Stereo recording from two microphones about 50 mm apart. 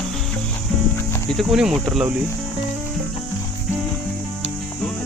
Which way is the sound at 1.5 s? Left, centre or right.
Centre.